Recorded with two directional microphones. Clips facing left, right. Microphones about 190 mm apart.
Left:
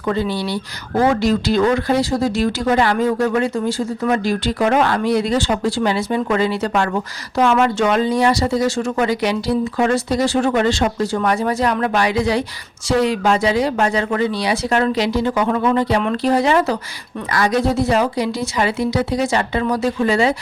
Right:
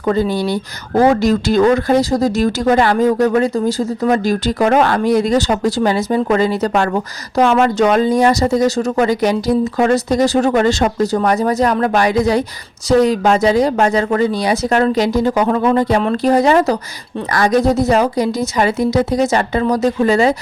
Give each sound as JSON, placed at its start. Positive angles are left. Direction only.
{"t": 0.0, "sound": "speech", "side_deg": -40}